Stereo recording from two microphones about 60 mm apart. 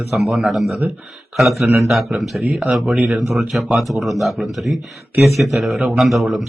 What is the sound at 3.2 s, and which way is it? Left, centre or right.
Speech, centre.